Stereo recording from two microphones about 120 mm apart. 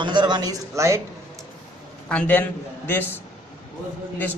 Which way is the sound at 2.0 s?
10° left (ahead or behind).